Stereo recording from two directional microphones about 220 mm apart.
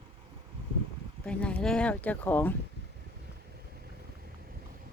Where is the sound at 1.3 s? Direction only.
5° left (ahead or behind).